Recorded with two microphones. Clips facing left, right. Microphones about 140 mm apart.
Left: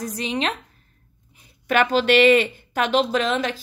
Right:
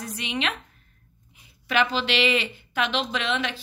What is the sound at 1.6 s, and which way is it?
A woman's voice, 50° left (ahead or behind).